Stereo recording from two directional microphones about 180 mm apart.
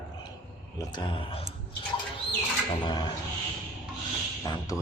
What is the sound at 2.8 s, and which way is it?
Speech, 25° left (ahead or behind).